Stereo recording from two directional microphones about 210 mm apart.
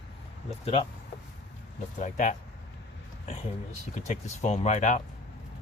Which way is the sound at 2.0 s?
35° left (ahead or behind).